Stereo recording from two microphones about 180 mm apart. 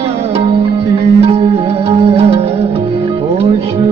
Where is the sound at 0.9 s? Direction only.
35° right (ahead or behind).